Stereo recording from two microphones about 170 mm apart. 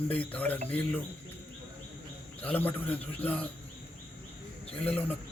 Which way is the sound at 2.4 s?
10° left (ahead or behind).